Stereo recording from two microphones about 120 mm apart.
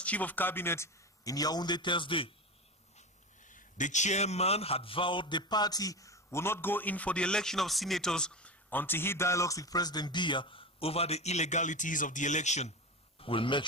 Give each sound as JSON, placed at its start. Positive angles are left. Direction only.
{"t": 0.0, "sound": "a man's voice", "side_deg": 10}
{"t": 3.0, "sound": "a man's voice", "side_deg": 90}
{"t": 13.2, "sound": "speech", "side_deg": 45}